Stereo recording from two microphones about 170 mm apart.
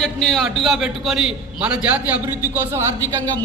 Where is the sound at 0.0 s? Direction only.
5° left (ahead or behind).